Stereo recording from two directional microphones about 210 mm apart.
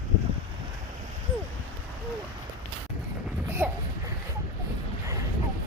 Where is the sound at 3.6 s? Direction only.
10° right (ahead or behind).